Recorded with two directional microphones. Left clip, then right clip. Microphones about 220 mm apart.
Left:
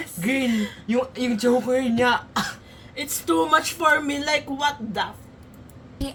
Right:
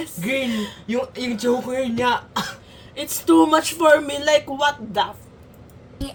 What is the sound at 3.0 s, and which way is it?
Speech, 20° right (ahead or behind).